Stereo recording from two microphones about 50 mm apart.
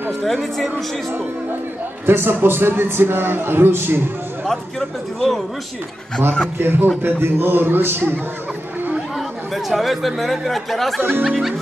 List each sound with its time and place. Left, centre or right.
0.2 s speech: centre
2.0 s a man's voice: right
4.5 s speech: centre
6.6 s a man's voice: right
9.1 s speech: centre